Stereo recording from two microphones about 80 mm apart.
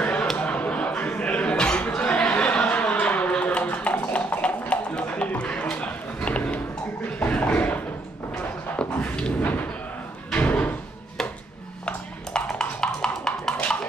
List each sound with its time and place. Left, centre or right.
0.0 s a sound: centre
10.3 s door: centre
11.8 s music: centre